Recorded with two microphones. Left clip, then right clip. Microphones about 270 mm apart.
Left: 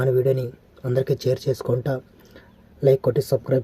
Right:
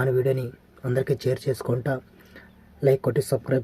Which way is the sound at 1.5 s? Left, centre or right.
Centre.